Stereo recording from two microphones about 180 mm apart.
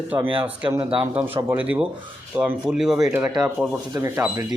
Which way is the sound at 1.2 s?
10° right (ahead or behind).